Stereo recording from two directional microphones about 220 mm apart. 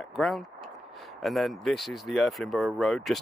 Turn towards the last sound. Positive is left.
turn(degrees=0)  # may be behind; listen again after turning